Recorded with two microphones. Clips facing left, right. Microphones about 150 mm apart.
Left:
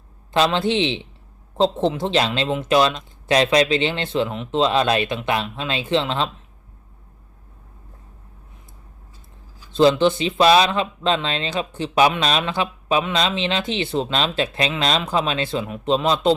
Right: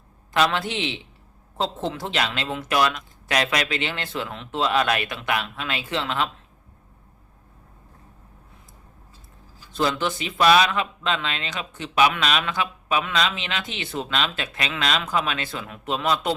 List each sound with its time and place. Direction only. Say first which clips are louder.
0.3 s speech: left 4 dB; 25° left (ahead or behind)
9.7 s speech: left 9 dB; 25° left (ahead or behind)